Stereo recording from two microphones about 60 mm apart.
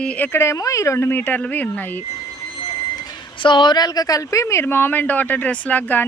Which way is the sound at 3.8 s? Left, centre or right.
Left.